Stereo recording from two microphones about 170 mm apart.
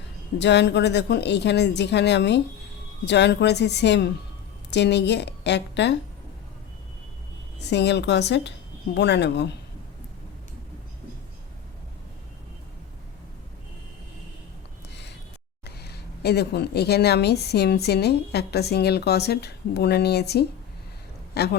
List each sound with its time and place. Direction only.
0.3 s a woman's voice: 90° left
7.6 s speech: 90° left
15.6 s speech: 70° left (ahead or behind)